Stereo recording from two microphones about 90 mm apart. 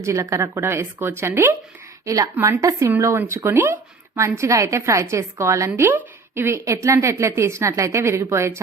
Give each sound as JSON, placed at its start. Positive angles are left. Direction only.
{"t": 0.0, "sound": "speech", "side_deg": -35}
{"t": 2.0, "sound": "a woman's voice", "side_deg": -40}
{"t": 2.3, "sound": "speech", "side_deg": -25}
{"t": 2.6, "sound": "a woman's voice", "side_deg": -35}